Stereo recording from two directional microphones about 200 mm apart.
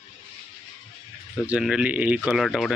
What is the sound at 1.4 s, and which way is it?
Speech, 5° right (ahead or behind).